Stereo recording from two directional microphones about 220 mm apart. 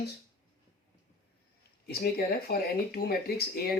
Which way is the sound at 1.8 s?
45° left (ahead or behind).